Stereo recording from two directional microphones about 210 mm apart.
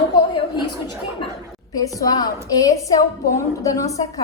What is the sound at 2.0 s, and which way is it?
A woman's voice, 20° left (ahead or behind).